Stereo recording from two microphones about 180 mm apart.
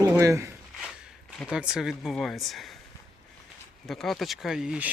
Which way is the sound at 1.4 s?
5° right (ahead or behind).